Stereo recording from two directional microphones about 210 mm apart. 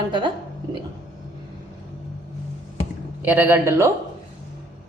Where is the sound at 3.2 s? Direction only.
10° right (ahead or behind).